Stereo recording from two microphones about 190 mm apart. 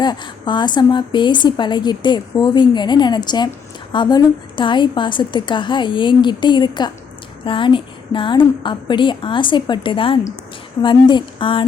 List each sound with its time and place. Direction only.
0.0 s a woman's voice: 25° left (ahead or behind)